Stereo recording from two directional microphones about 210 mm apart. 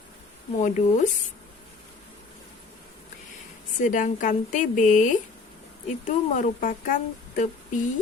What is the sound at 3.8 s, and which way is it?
A woman's voice, 40° left (ahead or behind).